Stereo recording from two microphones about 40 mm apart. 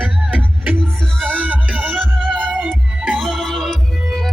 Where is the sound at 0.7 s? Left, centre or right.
Centre.